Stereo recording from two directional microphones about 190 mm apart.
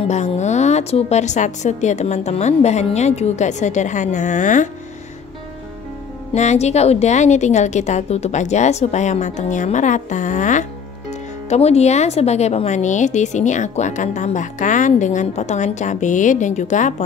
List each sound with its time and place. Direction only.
0.1 s speech: 35° left (ahead or behind)
6.3 s speech: 35° left (ahead or behind)